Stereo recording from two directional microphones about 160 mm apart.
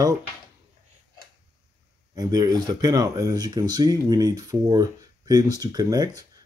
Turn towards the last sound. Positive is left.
turn(degrees=-25)  # may be behind; listen again after turning